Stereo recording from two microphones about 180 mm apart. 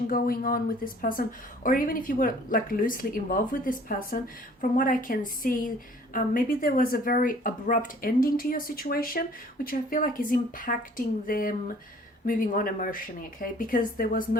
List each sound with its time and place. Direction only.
0.1 s speech: 55° left (ahead or behind)